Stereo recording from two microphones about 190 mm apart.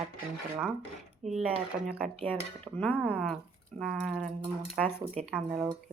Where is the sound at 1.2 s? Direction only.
35° right (ahead or behind).